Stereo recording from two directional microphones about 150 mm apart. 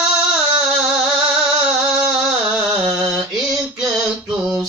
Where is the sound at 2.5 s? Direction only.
5° right (ahead or behind).